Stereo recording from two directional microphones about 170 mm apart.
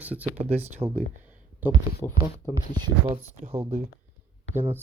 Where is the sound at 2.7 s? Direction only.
25° right (ahead or behind).